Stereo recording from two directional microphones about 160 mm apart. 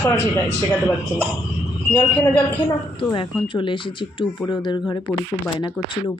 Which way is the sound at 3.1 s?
30° left (ahead or behind).